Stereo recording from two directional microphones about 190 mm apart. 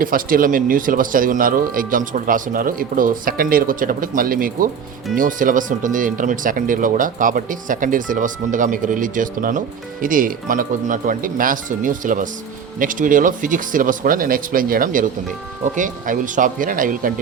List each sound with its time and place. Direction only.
0.0 s speech: 45° right (ahead or behind)